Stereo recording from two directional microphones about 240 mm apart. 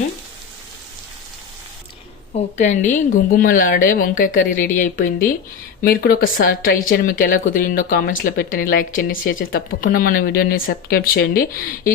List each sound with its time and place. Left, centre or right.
2.6 s speech: left